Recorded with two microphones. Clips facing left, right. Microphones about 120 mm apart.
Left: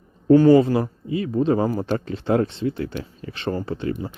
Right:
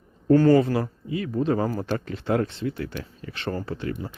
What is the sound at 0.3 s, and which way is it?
Speech, 15° left (ahead or behind).